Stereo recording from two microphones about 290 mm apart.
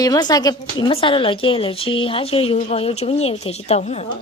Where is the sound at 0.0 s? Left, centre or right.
Centre.